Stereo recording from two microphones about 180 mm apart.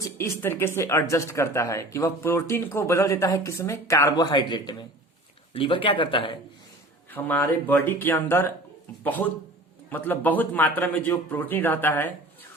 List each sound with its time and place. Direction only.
0.2 s speech: 10° left (ahead or behind); by 6.3 s 30° left (ahead or behind)
7.1 s speech: 10° left (ahead or behind)